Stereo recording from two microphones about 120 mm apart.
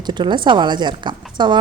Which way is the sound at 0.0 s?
40° right (ahead or behind).